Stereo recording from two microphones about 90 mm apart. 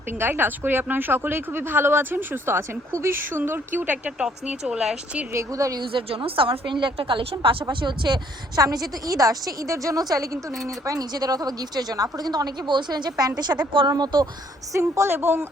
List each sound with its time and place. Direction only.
0.2 s speech: 25° right (ahead or behind)
4.2 s speech: 5° right (ahead or behind)
5.3 s a woman's voice: 35° right (ahead or behind)
5.9 s a woman's voice: 85° right; by 8.6 s 55° right (ahead or behind)
8.6 s a woman's voice: 40° right (ahead or behind)
14.7 s speech: 30° right (ahead or behind)